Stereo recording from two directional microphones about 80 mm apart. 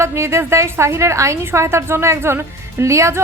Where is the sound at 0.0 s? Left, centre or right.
Right.